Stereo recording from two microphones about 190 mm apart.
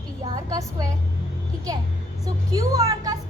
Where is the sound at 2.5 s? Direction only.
20° right (ahead or behind).